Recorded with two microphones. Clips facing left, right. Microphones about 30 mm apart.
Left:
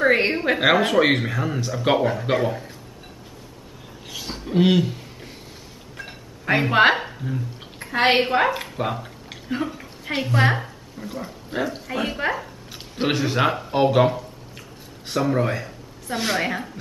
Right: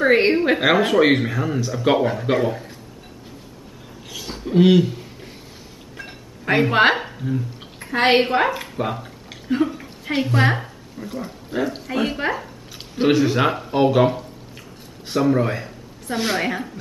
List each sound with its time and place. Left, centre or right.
0.0 s speech: centre
4.1 s a sound: centre
5.9 s speech: centre
11.5 s a man's voice: centre
11.9 s a woman's voice: centre